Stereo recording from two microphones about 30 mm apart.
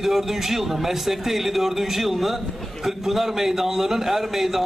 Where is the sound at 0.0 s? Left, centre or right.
Centre.